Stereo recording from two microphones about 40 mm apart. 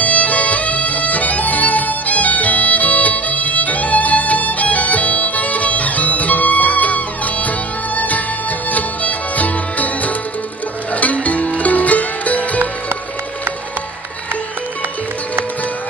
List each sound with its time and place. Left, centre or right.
0.0 s music: left